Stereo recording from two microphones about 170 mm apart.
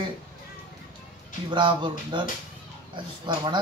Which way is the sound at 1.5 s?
25° right (ahead or behind).